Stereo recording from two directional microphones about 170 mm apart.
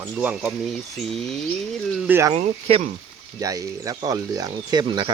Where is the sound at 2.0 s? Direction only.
15° right (ahead or behind).